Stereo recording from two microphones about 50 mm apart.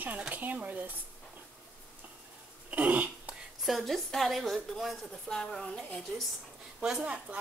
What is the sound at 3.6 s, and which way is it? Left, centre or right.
A woman's voice, centre.